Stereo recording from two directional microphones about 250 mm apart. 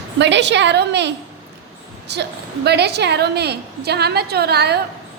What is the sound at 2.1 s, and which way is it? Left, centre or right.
A woman's voice, right.